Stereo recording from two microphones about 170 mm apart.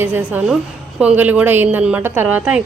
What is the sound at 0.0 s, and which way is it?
A woman's voice, 10° right (ahead or behind).